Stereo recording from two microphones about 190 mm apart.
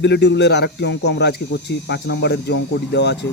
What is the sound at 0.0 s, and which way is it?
Speech, 65° left (ahead or behind).